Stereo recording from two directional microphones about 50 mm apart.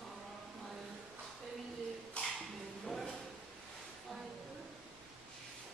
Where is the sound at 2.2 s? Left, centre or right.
Left.